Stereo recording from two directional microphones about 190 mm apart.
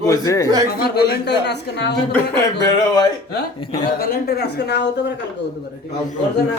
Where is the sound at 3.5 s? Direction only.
25° left (ahead or behind).